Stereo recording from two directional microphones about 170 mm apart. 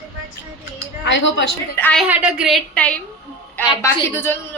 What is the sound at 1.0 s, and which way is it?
Speech, 90° left.